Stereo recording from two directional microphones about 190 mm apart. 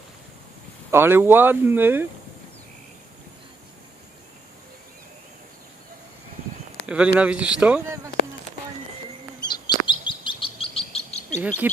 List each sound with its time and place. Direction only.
0.9 s speech: 10° right (ahead or behind)
6.8 s speech: 5° right (ahead or behind)
9.4 s chirp: 20° left (ahead or behind)
11.3 s speech: 10° right (ahead or behind)